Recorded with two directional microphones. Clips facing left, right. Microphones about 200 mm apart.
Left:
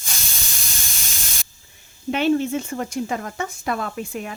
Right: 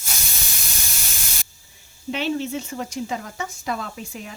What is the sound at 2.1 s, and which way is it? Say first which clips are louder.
Speech: left 5 dB; 55° left (ahead or behind).